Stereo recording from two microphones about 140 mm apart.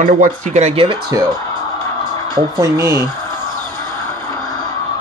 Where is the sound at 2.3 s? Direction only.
20° right (ahead or behind).